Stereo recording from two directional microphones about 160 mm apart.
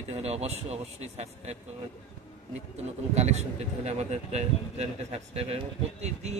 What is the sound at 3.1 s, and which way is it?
A man's voice, 45° right (ahead or behind).